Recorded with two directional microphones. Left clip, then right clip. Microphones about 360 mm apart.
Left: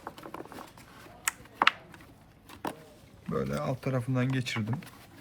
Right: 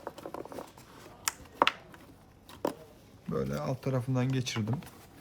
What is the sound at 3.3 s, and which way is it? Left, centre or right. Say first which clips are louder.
Speech: left 2 dB; centre.